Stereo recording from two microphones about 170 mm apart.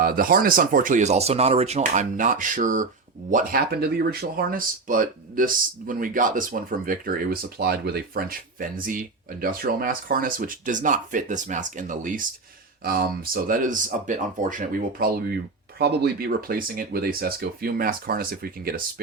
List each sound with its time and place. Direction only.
0.0 s speech: 60° right (ahead or behind)